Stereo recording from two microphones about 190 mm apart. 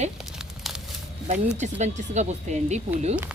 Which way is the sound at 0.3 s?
5° right (ahead or behind).